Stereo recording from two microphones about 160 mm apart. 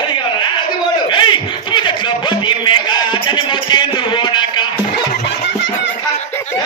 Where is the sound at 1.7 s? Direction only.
30° left (ahead or behind).